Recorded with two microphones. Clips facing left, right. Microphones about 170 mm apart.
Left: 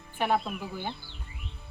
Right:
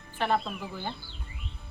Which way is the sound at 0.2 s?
10° left (ahead or behind).